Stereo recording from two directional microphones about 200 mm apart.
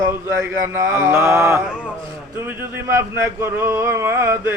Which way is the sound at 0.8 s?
10° right (ahead or behind).